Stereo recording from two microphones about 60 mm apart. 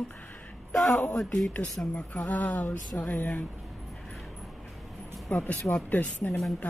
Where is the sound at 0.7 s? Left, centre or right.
Centre.